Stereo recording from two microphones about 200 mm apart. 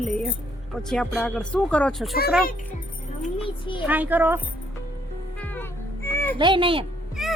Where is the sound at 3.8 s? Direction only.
10° right (ahead or behind).